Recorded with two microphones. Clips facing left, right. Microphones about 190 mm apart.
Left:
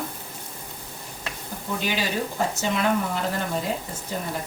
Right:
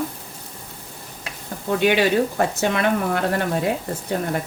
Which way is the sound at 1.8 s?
65° right (ahead or behind).